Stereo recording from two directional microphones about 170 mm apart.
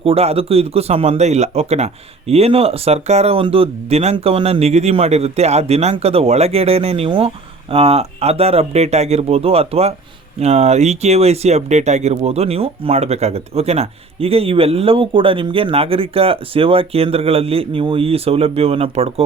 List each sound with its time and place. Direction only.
0.0 s speech: 35° right (ahead or behind)